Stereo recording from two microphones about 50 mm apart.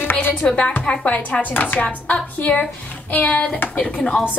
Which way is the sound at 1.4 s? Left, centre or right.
Left.